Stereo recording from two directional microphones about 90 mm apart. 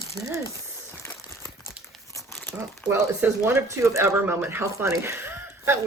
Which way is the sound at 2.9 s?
25° right (ahead or behind).